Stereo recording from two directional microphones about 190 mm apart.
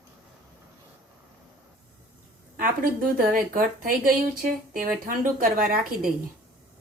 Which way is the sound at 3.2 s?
50° right (ahead or behind).